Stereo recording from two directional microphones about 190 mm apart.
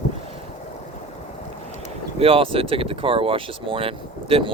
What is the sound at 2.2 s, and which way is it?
Speech, 30° right (ahead or behind).